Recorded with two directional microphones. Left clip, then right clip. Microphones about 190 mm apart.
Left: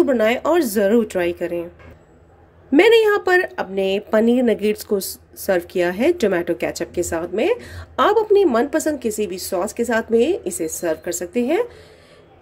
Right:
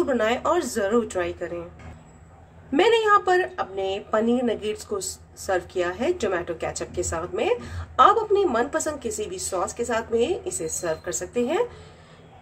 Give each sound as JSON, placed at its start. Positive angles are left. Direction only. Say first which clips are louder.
{"t": 0.0, "sound": "a woman's voice", "louder": "left 5 dB", "side_deg": 30}
{"t": 2.7, "sound": "a woman's voice", "louder": "left 5 dB", "side_deg": 35}